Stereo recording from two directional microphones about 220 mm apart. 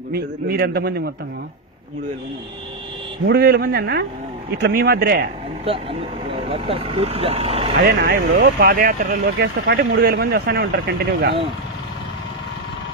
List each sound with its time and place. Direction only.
0.1 s speech: 45° right (ahead or behind)
3.3 s speech: 45° right (ahead or behind)
5.7 s speech: 25° right (ahead or behind)
7.7 s speech: 55° right (ahead or behind)
8.1 s speech: 40° right (ahead or behind)